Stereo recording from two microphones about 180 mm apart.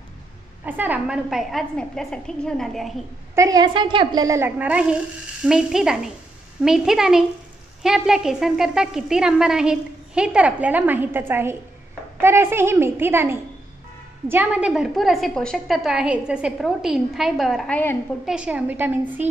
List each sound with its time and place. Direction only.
0.7 s a woman's voice: 10° right (ahead or behind)
3.3 s a woman's voice: 20° right (ahead or behind); by 17.9 s 10° left (ahead or behind)
18.2 s a woman's voice: 5° right (ahead or behind)